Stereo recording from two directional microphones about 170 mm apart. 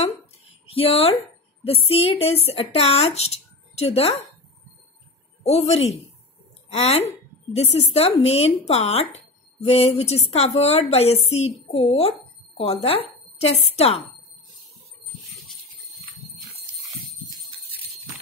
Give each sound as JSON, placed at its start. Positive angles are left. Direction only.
{"t": 0.7, "sound": "a woman's voice", "side_deg": 35}
{"t": 5.4, "sound": "a woman's voice", "side_deg": 40}